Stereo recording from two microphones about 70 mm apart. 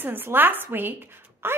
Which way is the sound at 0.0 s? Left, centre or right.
Right.